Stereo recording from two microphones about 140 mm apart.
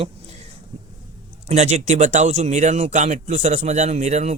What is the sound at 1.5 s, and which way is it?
Speech, 55° right (ahead or behind).